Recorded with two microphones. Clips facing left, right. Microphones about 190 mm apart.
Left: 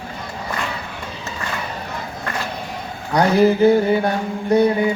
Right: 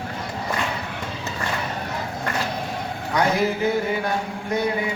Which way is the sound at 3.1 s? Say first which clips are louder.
Left 7 dB; 35° left (ahead or behind).